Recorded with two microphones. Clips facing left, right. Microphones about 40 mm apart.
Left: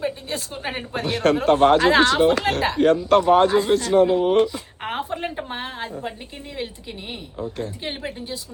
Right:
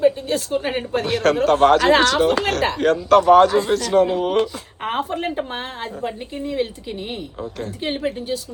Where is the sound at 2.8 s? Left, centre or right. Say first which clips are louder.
Right 1 dB; centre.